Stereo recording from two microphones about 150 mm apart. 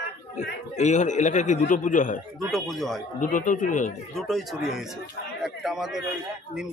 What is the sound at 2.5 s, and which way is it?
Speech, centre (ahead or behind).